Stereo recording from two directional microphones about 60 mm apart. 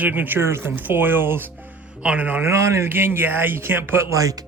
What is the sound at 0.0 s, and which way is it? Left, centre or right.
Speech, right.